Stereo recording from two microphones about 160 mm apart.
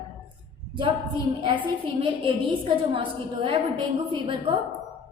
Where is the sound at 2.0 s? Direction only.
30° right (ahead or behind).